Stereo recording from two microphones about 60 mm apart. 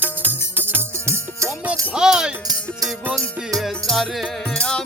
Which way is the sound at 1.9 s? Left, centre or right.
Centre.